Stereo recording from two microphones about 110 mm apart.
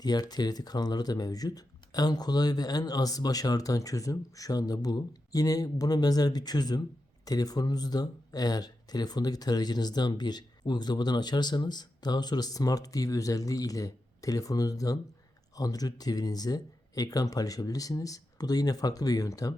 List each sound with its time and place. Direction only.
0.0 s speech: 35° left (ahead or behind)